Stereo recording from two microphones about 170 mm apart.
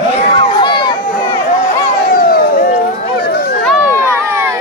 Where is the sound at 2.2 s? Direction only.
60° left (ahead or behind).